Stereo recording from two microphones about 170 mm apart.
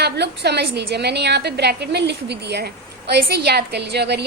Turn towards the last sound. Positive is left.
turn(degrees=-80)